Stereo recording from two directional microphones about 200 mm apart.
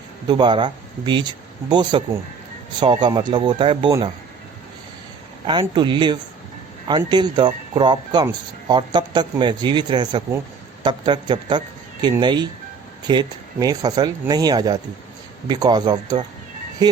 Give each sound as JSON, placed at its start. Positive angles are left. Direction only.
{"t": 0.3, "sound": "speech", "side_deg": -20}
{"t": 5.5, "sound": "speech", "side_deg": -25}